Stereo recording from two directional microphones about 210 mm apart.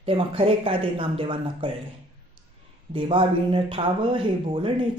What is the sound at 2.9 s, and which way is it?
Speech, 25° right (ahead or behind).